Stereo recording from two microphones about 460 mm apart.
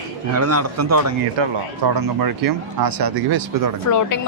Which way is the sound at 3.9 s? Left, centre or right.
Left.